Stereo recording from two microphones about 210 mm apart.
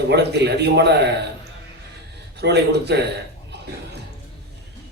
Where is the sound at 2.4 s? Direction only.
55° right (ahead or behind).